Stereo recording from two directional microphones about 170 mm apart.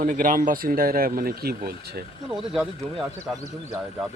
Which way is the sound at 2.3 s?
5° right (ahead or behind).